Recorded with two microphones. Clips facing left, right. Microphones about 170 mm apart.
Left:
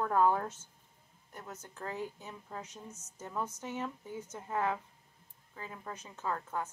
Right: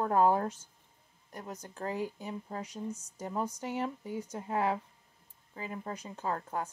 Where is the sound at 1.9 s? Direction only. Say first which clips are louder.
Right 5 dB; 15° right (ahead or behind).